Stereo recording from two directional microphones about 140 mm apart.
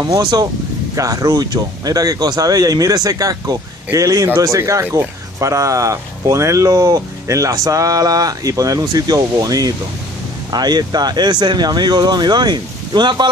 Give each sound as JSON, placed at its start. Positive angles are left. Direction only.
{"t": 0.0, "sound": "speech", "side_deg": -30}